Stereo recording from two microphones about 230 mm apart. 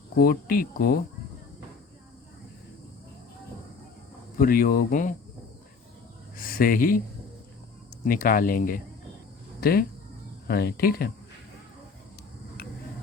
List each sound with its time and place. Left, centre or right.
0.2 s speech: left
4.4 s speech: left
6.3 s speech: left
8.0 s speech: left